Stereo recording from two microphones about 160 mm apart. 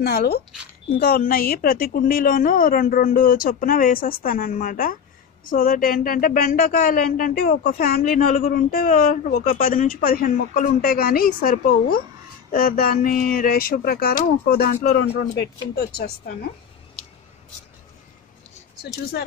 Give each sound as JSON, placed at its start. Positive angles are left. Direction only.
{"t": 0.0, "sound": "speech", "side_deg": 75}
{"t": 15.7, "sound": "speech", "side_deg": 80}